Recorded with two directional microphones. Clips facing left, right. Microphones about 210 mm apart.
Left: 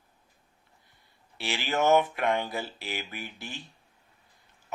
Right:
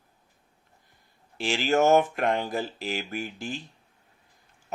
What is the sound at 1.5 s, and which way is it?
Speech, 45° right (ahead or behind).